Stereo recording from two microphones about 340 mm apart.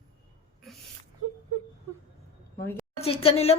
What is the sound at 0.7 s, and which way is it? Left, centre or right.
Whimper, centre.